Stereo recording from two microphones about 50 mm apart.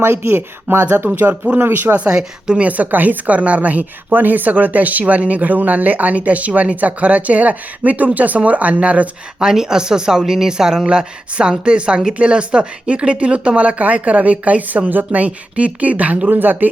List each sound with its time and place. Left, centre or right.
0.0 s a woman's voice: right
2.0 s speech: centre
2.6 s a woman's voice: right
9.4 s speech: centre; by 16.3 s right
16.3 s a woman's voice: right